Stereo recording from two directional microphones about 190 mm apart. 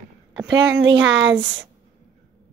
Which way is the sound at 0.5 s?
70° right (ahead or behind).